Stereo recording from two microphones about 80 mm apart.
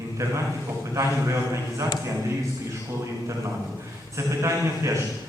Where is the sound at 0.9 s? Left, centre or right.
Right.